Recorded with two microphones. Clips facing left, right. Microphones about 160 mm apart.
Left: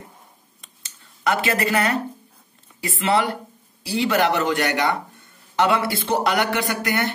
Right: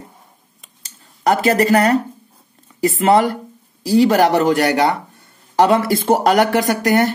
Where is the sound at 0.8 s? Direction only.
40° right (ahead or behind).